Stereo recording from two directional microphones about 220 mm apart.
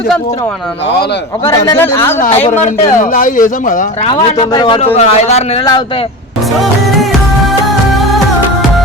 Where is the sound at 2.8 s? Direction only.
35° left (ahead or behind).